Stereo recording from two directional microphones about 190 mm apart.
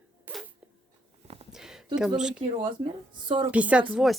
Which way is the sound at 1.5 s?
5° right (ahead or behind).